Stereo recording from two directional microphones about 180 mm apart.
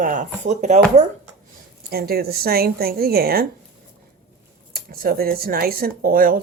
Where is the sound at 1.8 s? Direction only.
55° right (ahead or behind).